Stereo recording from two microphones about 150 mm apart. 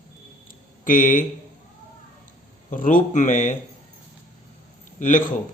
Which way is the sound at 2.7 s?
60° left (ahead or behind).